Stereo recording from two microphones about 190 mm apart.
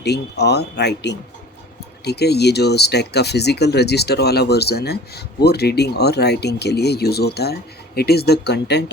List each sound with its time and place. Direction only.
0.0 s speech: 60° left (ahead or behind)